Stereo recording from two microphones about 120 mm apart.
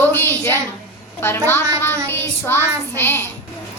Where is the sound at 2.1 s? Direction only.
20° left (ahead or behind).